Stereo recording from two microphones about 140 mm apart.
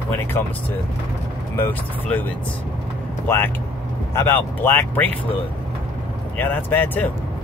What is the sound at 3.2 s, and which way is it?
Speech, 15° left (ahead or behind).